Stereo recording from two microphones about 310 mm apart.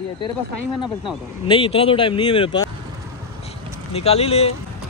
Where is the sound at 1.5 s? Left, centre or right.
Centre.